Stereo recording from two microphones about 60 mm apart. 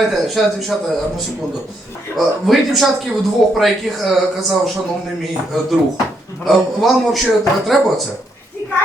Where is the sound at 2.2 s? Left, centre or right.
Centre.